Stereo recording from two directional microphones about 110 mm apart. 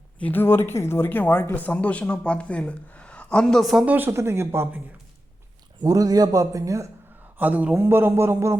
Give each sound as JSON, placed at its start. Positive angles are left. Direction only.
{"t": 0.2, "sound": "speech", "side_deg": 15}
{"t": 3.8, "sound": "speech", "side_deg": -20}
{"t": 5.8, "sound": "a man's voice", "side_deg": -30}
{"t": 7.3, "sound": "a man's voice", "side_deg": -15}